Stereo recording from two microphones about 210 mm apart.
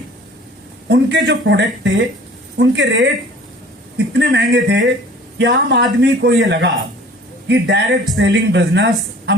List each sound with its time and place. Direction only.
0.9 s speech: 55° right (ahead or behind)
7.4 s speech: 60° right (ahead or behind)